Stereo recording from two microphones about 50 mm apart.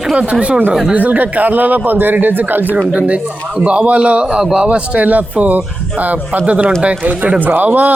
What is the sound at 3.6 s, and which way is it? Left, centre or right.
Speech, right.